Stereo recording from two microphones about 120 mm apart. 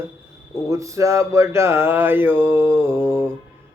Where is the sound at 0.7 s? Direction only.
25° right (ahead or behind).